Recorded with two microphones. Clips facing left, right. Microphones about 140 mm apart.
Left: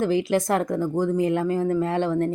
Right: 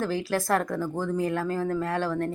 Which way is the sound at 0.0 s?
20° left (ahead or behind).